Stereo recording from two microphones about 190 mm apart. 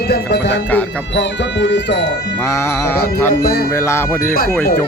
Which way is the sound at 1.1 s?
70° left (ahead or behind).